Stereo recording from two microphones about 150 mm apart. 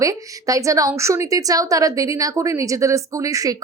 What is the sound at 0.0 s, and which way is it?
A woman's voice, 20° right (ahead or behind).